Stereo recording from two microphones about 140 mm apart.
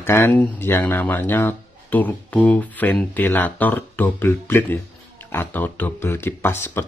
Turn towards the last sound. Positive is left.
turn(degrees=15)  # may be behind; listen again after turning